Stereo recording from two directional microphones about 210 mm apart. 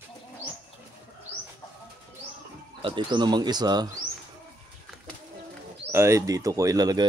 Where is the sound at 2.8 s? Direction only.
20° right (ahead or behind).